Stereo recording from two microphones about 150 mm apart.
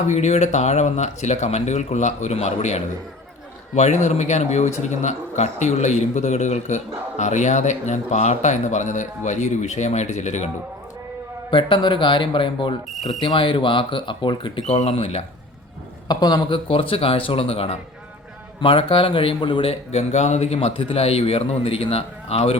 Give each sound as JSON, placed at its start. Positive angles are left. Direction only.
{"t": 0.1, "sound": "a man's voice", "side_deg": 50}
{"t": 11.5, "sound": "a man's voice", "side_deg": 35}
{"t": 14.6, "sound": "a man's voice", "side_deg": 45}
{"t": 16.0, "sound": "a man's voice", "side_deg": 30}
{"t": 19.9, "sound": "a man's voice", "side_deg": 50}